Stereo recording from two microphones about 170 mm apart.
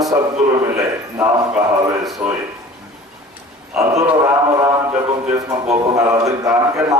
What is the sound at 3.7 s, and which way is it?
A man's voice, 20° right (ahead or behind).